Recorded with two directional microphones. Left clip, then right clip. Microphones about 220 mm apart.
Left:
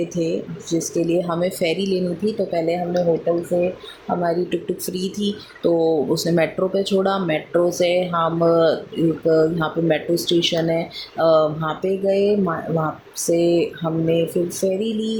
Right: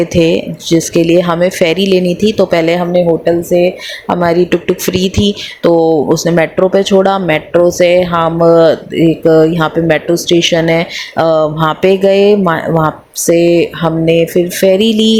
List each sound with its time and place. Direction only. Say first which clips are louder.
0.1 s speech: right 13 dB; 35° right (ahead or behind)
4.2 s speech: right 12 dB; 35° right (ahead or behind)